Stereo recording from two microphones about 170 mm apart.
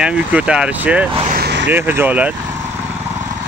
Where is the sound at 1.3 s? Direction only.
75° right (ahead or behind).